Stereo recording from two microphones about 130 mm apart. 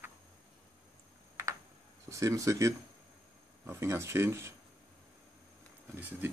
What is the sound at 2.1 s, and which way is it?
Speech, 25° right (ahead or behind).